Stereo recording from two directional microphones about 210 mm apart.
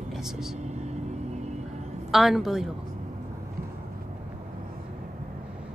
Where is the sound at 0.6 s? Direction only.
35° right (ahead or behind).